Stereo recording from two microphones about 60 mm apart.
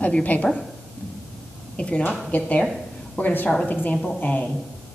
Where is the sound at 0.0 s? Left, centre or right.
Left.